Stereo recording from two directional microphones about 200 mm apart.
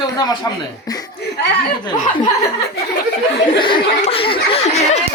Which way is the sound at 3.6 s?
25° left (ahead or behind).